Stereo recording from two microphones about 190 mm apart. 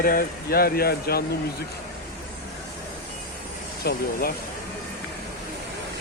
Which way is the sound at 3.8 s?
55° left (ahead or behind).